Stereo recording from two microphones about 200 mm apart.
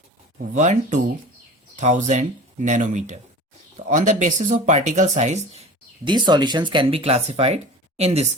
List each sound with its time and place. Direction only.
0.3 s speech: 35° right (ahead or behind)
6.1 s speech: 20° right (ahead or behind)